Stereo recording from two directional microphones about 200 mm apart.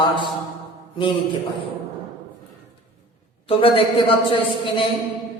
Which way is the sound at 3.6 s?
25° left (ahead or behind).